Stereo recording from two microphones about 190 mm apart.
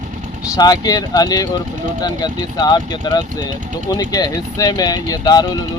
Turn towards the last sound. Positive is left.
turn(degrees=20)  # may be behind; listen again after turning